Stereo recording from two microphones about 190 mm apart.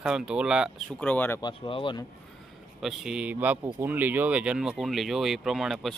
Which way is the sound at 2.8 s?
Centre (ahead or behind).